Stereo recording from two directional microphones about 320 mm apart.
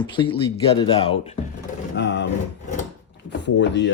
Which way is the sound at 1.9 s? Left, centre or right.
Left.